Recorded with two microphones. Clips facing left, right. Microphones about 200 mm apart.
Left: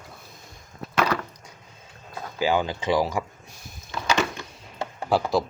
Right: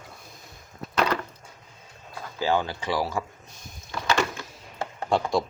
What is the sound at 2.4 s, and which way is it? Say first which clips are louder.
Speech: left 2 dB; 15° left (ahead or behind).